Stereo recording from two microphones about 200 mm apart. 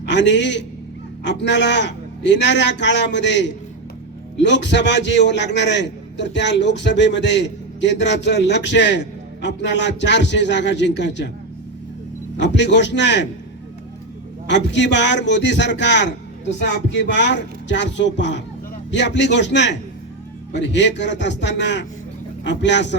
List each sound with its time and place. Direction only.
0.0 s a man's voice: 60° left (ahead or behind)
12.4 s a man's voice: 60° left (ahead or behind)
14.4 s a man's voice: 60° left (ahead or behind)